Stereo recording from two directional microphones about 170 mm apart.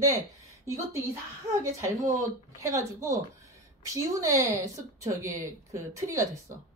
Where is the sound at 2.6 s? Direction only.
20° right (ahead or behind).